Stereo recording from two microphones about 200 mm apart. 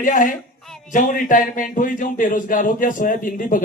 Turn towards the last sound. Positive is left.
turn(degrees=40)  # may be behind; listen again after turning